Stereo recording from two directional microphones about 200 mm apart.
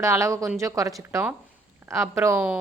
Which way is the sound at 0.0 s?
15° right (ahead or behind).